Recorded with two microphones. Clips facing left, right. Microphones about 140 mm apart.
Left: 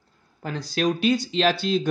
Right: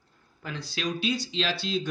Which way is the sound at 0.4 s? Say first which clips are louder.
Left 8 dB; 45° left (ahead or behind).